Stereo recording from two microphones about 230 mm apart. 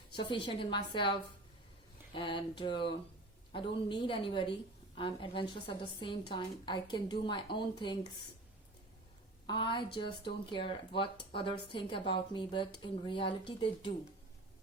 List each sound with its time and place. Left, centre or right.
0.1 s a woman's voice: left
9.5 s a woman's voice: left